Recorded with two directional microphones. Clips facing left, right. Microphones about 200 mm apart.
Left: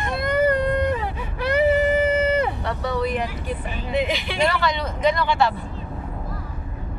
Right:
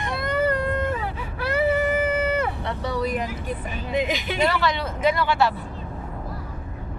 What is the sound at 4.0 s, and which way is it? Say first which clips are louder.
Speech: left 1 dB; 45° right (ahead or behind).